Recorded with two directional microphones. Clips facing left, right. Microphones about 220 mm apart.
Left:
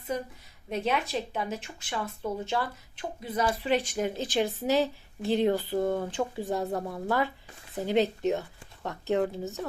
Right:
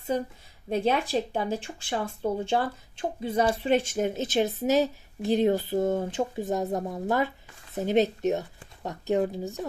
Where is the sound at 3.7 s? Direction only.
45° right (ahead or behind).